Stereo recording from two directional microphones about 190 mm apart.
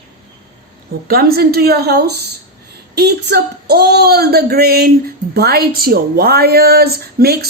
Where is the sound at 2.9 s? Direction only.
60° right (ahead or behind).